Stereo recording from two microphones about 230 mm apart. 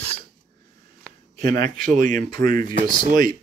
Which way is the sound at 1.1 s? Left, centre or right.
Centre.